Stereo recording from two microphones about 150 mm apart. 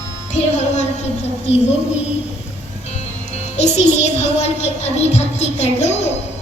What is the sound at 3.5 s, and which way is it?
Music, 50° left (ahead or behind).